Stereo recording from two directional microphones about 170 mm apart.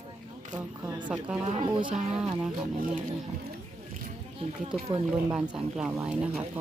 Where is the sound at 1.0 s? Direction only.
10° right (ahead or behind).